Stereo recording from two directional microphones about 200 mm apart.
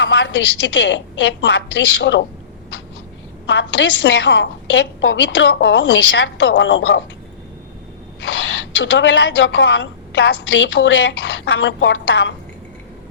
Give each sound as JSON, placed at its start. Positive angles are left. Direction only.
{"t": 0.0, "sound": "a woman's voice", "side_deg": 60}
{"t": 3.5, "sound": "a woman's voice", "side_deg": 65}
{"t": 8.2, "sound": "a woman's voice", "side_deg": 65}